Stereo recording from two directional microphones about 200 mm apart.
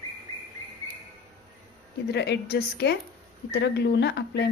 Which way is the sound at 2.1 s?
60° left (ahead or behind).